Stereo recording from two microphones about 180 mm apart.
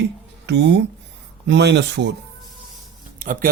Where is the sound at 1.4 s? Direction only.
75° right (ahead or behind).